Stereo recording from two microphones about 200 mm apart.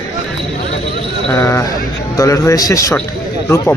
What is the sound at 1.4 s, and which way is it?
Speech, 15° left (ahead or behind).